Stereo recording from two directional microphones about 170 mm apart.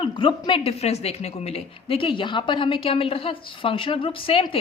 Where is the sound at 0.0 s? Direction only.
30° left (ahead or behind).